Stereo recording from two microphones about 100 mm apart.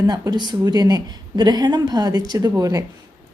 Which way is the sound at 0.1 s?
45° right (ahead or behind).